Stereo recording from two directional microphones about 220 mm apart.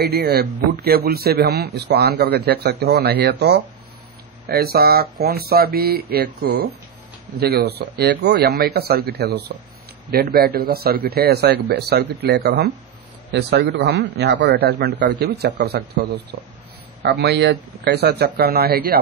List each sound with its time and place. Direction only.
0.0 s a man's voice: 50° right (ahead or behind)